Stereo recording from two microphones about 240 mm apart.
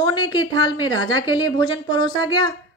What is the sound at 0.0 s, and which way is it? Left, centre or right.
A woman's voice, centre.